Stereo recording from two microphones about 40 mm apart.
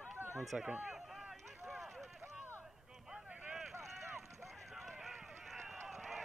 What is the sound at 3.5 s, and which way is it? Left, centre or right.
Vehicle, centre.